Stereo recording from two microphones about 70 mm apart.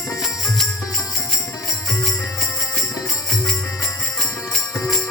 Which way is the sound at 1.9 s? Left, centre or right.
Centre.